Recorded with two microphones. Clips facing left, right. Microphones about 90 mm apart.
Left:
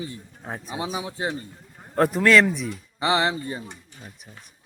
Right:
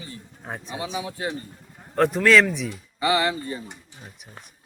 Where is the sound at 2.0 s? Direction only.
5° left (ahead or behind).